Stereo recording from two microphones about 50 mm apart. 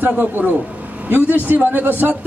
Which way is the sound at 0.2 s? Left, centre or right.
Right.